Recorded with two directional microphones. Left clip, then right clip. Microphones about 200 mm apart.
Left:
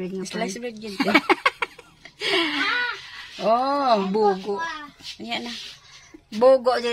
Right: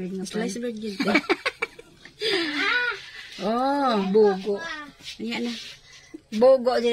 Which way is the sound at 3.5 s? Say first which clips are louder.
Left 3 dB; 45° left (ahead or behind).